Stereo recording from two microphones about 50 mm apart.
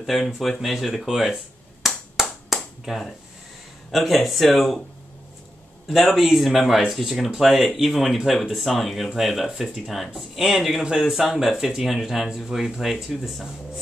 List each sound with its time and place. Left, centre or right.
0.0 s speech: centre
2.2 s clapping: centre
2.8 s speech: centre
5.9 s speech: centre